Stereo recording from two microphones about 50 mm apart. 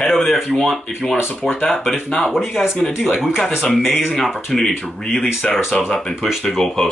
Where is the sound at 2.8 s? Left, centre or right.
Left.